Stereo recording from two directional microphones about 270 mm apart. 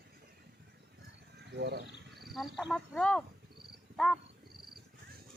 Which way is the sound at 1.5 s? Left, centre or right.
Right.